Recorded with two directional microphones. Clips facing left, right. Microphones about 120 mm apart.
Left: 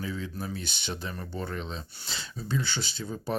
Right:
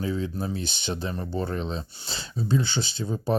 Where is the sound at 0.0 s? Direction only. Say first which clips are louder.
Right 6 dB; 30° right (ahead or behind).